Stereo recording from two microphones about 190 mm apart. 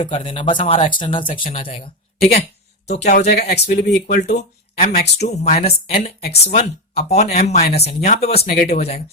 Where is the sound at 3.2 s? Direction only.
55° left (ahead or behind).